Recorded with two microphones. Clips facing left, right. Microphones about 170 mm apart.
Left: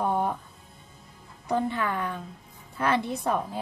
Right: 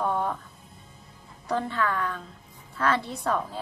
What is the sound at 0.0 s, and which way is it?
Music, 20° left (ahead or behind).